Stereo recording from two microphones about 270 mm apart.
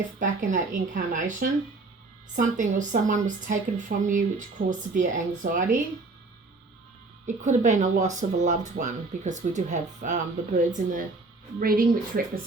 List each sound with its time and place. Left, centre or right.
0.2 s speech: right
7.4 s speech: right